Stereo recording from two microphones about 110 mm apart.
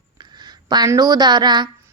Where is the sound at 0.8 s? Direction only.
35° right (ahead or behind).